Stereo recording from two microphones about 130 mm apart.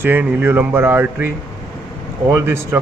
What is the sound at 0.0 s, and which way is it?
Speech, 15° right (ahead or behind).